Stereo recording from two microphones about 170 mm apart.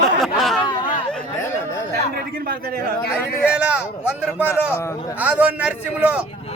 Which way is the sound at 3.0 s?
70° left (ahead or behind).